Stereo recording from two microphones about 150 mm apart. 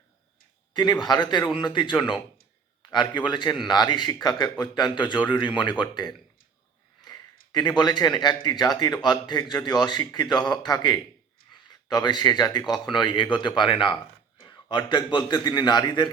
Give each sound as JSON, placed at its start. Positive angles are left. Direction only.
{"t": 0.8, "sound": "speech", "side_deg": 25}